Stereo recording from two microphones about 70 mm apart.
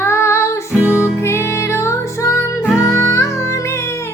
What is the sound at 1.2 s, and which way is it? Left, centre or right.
Music, left.